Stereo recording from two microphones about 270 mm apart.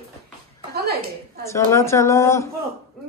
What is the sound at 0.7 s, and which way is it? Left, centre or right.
Speech, right.